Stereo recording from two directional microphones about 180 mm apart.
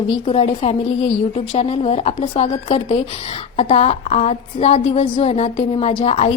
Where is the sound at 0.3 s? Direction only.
35° left (ahead or behind).